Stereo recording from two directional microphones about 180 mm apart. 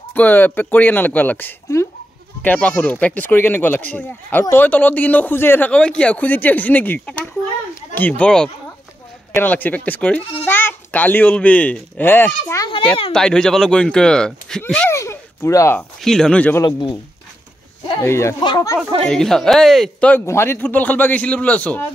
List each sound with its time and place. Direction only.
0.1 s speech: 10° left (ahead or behind)
15.0 s a sound: 15° left (ahead or behind)
16.0 s speech: centre (ahead or behind)
16.6 s speech: 25° left (ahead or behind)
18.0 s speech: 15° left (ahead or behind)
19.0 s speech: 5° left (ahead or behind)